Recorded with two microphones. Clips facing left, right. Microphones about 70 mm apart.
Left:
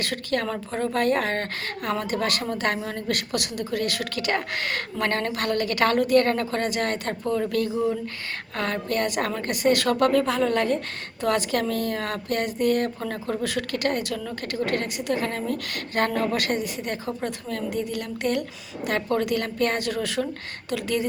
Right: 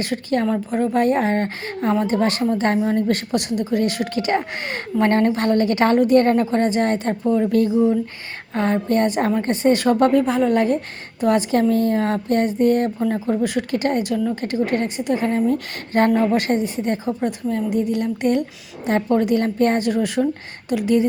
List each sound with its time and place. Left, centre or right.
0.0 s a woman's voice: right
7.5 s a woman's voice: right
13.0 s a woman's voice: centre